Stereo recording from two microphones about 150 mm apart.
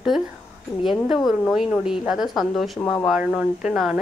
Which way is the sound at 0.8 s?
Centre (ahead or behind).